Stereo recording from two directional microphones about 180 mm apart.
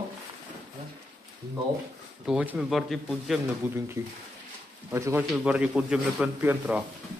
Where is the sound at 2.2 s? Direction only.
5° right (ahead or behind).